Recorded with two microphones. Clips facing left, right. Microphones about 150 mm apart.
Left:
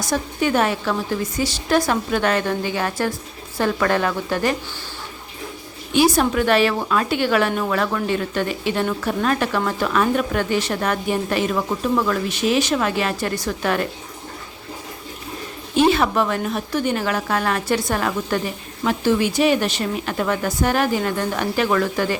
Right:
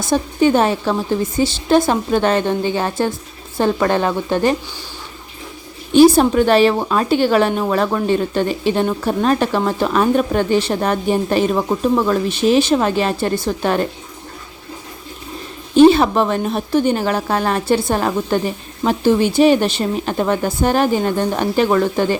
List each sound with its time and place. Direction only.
0.0 s a woman's voice: 25° right (ahead or behind)
6.1 s a woman's voice: 30° right (ahead or behind)
15.9 s a woman's voice: 30° right (ahead or behind)